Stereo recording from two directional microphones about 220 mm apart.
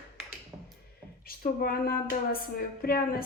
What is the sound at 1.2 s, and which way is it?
A woman's voice, 40° left (ahead or behind).